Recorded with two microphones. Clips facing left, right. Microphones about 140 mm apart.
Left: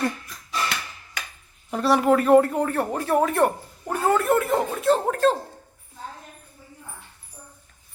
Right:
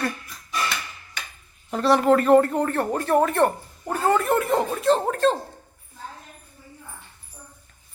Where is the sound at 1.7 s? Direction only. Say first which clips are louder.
Right 1 dB; 5° left (ahead or behind).